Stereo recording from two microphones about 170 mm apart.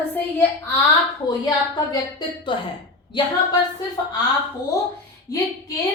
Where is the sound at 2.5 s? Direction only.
30° left (ahead or behind).